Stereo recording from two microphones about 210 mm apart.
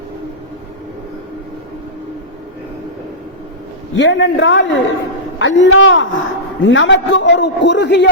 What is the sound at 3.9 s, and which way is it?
A man's voice, 60° left (ahead or behind).